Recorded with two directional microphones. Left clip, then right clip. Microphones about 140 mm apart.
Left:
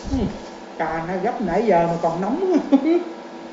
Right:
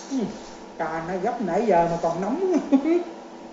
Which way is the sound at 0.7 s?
10° left (ahead or behind).